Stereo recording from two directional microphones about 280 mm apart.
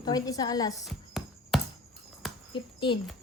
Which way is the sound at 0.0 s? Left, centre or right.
Centre.